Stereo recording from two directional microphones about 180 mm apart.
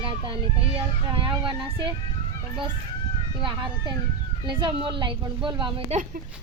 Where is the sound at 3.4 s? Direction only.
25° right (ahead or behind).